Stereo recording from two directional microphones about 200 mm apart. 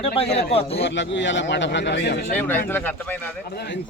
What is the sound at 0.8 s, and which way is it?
A man's voice, 65° left (ahead or behind).